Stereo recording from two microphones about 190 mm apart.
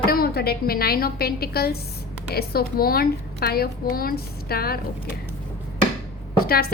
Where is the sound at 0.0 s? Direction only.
50° left (ahead or behind).